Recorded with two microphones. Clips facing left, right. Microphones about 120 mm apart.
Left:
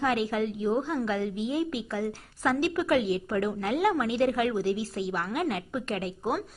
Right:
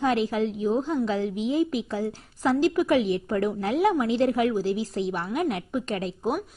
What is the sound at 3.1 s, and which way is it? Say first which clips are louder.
A woman's voice: right 3 dB; 25° right (ahead or behind).